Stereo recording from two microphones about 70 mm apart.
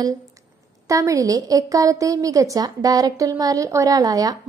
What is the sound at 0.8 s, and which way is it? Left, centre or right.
A woman's voice, right.